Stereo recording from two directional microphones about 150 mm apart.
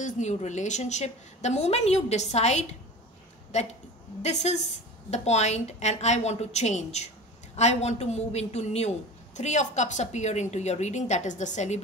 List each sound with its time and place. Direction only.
0.0 s a woman's voice: 50° left (ahead or behind)